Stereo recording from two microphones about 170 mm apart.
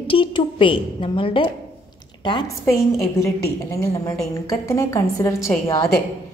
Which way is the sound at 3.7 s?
15° left (ahead or behind).